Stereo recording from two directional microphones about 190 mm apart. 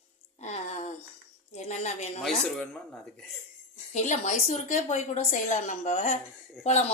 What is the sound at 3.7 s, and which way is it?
A woman's voice, 40° left (ahead or behind).